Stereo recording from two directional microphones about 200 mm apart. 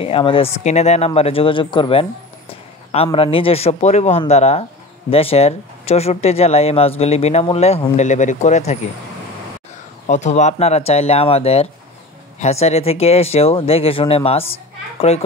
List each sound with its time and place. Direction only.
0.0 s speech: 25° left (ahead or behind)
10.0 s speech: 35° left (ahead or behind)